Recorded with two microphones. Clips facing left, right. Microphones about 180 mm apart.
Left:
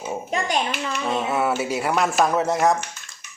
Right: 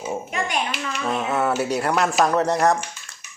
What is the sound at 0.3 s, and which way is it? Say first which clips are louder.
Hands: left 5 dB; 35° left (ahead or behind).